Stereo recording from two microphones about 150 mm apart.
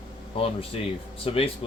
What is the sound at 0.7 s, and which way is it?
Speech, 40° left (ahead or behind).